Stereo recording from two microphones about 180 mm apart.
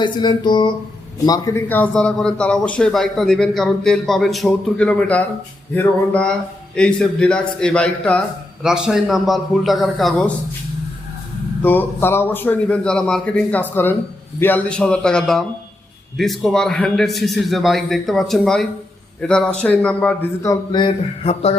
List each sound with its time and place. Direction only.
0.0 s a man's voice: 25° left (ahead or behind); by 10.3 s centre (ahead or behind)
11.6 s a man's voice: 10° left (ahead or behind); by 21.5 s 30° left (ahead or behind)